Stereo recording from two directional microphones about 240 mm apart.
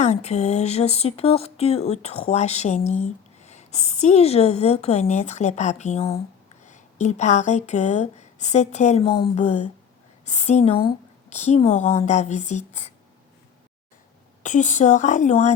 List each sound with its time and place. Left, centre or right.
0.0 s speech: left
14.4 s a woman's voice: left